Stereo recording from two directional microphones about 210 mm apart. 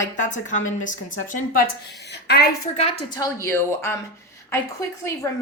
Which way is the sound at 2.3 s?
50° left (ahead or behind).